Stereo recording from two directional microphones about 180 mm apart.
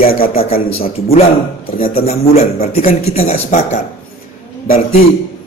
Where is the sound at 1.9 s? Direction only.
35° left (ahead or behind).